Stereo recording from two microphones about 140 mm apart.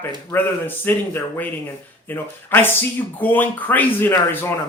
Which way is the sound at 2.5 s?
15° left (ahead or behind).